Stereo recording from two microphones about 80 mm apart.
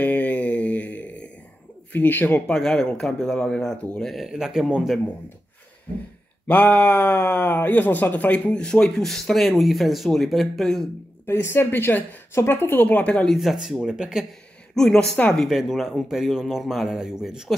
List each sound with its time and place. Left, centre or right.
0.0 s mantra: centre
1.9 s a woman's voice: left
2.4 s speech: centre
4.1 s speech: centre
6.4 s speech: left; by 10.9 s centre
11.2 s a woman's voice: left
13.1 s speech: centre
14.8 s speech: centre
15.4 s speech: centre